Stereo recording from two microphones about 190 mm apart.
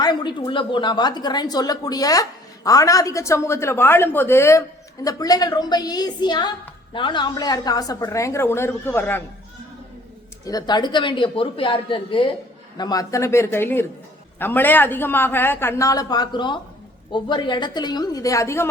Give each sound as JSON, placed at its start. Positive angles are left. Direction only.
{"t": 0.0, "sound": "a woman's voice", "side_deg": 25}
{"t": 10.4, "sound": "a woman's voice", "side_deg": 20}